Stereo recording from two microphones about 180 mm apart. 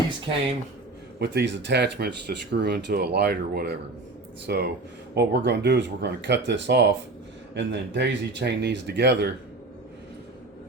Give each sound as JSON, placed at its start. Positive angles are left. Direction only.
{"t": 1.2, "sound": "speech", "side_deg": -70}